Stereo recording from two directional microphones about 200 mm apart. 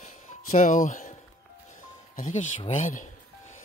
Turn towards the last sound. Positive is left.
turn(degrees=35)  # may be behind; listen again after turning